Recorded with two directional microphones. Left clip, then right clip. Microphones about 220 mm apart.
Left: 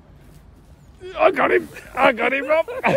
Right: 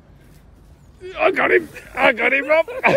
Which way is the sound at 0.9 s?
25° left (ahead or behind).